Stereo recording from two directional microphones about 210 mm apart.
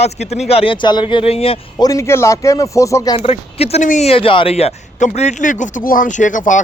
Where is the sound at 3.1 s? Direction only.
30° left (ahead or behind).